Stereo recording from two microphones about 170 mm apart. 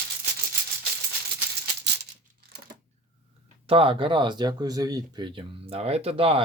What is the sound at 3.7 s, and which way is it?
Speech, 30° right (ahead or behind).